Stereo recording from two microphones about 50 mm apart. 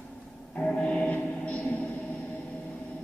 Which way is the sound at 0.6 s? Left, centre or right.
Centre.